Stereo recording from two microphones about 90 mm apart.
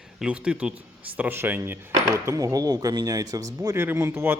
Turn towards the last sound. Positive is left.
turn(degrees=-25)  # may be behind; listen again after turning